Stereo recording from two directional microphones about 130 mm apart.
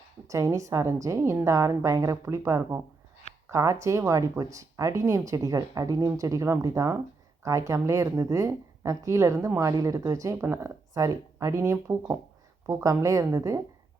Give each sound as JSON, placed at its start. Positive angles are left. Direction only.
{"t": 0.3, "sound": "speech", "side_deg": -25}